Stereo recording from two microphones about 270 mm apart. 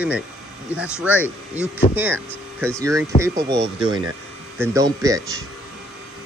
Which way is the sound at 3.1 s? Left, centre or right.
Left.